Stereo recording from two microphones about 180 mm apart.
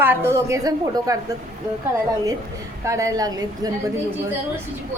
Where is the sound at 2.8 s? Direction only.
15° right (ahead or behind).